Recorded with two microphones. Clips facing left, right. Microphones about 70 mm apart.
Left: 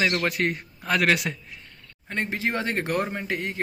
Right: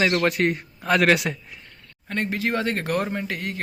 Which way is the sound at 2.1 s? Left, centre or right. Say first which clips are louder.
Right 2 dB; left.